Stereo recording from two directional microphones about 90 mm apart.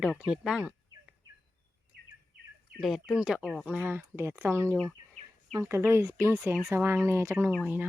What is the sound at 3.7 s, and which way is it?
Speech, 20° right (ahead or behind).